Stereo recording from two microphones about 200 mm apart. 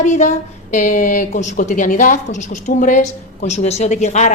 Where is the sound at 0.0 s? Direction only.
35° left (ahead or behind).